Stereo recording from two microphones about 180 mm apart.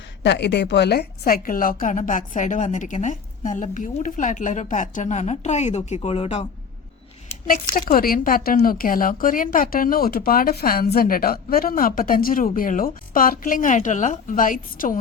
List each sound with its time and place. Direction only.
0.2 s speech: 75° left (ahead or behind); by 6.5 s 30° left (ahead or behind)
7.4 s speech: 50° left (ahead or behind)